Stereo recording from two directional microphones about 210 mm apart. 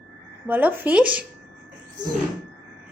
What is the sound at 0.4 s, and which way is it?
Speech, 10° right (ahead or behind).